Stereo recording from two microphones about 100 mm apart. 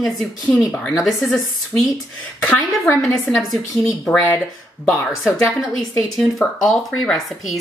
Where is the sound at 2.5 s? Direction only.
15° left (ahead or behind).